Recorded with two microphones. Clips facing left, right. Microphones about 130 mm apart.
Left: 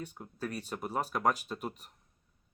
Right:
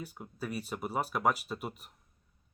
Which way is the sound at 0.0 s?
5° right (ahead or behind).